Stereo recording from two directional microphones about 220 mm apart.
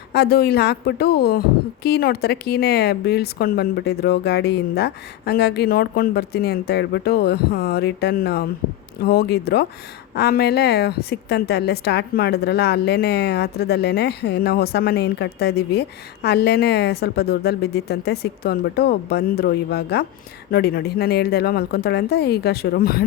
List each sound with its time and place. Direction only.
0.1 s a woman's voice: 50° left (ahead or behind)